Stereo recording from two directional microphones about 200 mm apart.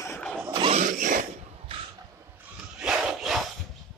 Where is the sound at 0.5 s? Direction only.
30° right (ahead or behind).